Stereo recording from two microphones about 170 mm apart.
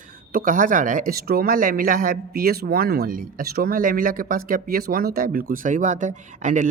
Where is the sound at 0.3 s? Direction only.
50° right (ahead or behind).